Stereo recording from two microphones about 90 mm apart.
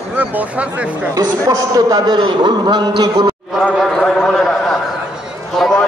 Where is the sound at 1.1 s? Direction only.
40° right (ahead or behind).